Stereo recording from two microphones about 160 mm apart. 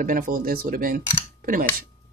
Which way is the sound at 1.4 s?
60° right (ahead or behind).